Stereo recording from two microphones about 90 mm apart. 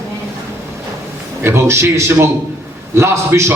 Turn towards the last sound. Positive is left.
turn(degrees=-30)  # may be behind; listen again after turning